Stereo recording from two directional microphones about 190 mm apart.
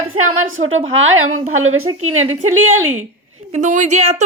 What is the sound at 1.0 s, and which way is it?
Speech, 90° right.